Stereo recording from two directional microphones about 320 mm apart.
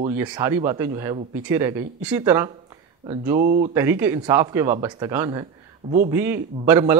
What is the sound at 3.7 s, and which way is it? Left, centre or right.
A man's voice, centre.